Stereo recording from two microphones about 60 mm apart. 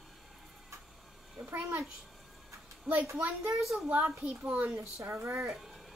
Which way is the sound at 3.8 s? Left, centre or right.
Right.